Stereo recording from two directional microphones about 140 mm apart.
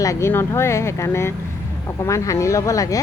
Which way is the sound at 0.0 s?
20° left (ahead or behind).